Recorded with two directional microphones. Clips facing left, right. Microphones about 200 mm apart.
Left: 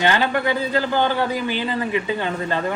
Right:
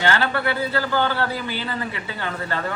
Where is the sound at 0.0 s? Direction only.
15° left (ahead or behind).